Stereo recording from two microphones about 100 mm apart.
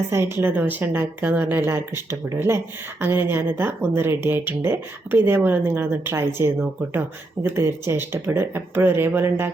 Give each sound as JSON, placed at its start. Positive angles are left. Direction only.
{"t": 0.1, "sound": "speech", "side_deg": -25}